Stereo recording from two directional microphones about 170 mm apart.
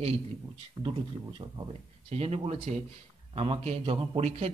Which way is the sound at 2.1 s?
40° right (ahead or behind).